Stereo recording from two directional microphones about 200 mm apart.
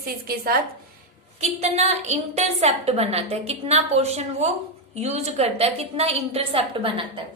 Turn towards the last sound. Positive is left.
turn(degrees=-25)  # may be behind; listen again after turning